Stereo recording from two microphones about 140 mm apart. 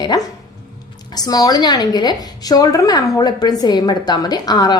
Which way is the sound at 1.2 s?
30° left (ahead or behind).